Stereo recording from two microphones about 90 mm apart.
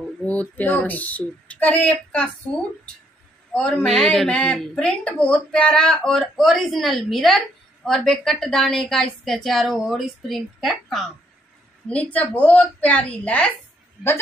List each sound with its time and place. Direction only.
0.2 s speech: 15° left (ahead or behind)
3.5 s speech: 15° left (ahead or behind)
3.8 s speech: 5° left (ahead or behind)
11.9 s speech: 15° left (ahead or behind)